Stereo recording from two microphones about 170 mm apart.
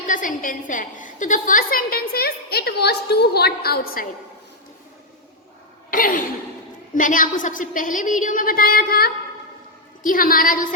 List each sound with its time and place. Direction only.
0.1 s a woman's voice: 50° left (ahead or behind)
5.9 s a sound: 55° left (ahead or behind)
6.9 s a woman's voice: 50° left (ahead or behind)